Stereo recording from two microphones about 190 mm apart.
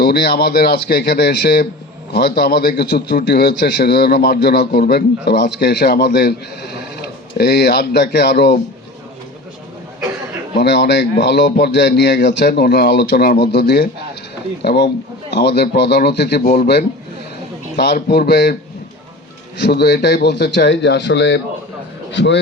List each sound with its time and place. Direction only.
0.0 s a man's voice: 55° left (ahead or behind)
10.6 s a man's voice: 65° left (ahead or behind)
19.5 s a man's voice: 65° left (ahead or behind)